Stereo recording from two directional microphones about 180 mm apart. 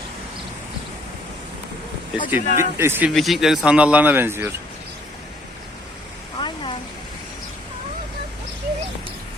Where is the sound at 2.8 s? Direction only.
10° right (ahead or behind).